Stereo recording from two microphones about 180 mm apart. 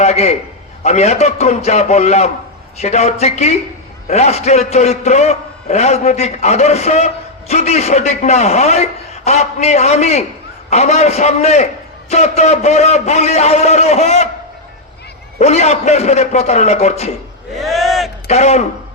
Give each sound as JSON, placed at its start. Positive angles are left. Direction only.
{"t": 0.0, "sound": "a man's voice", "side_deg": 35}
{"t": 15.4, "sound": "a man's voice", "side_deg": 40}
{"t": 17.5, "sound": "a sound", "side_deg": 0}
{"t": 18.3, "sound": "a man's voice", "side_deg": 40}